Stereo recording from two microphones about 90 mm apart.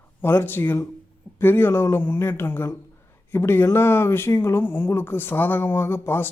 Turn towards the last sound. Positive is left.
turn(degrees=25)  # may be behind; listen again after turning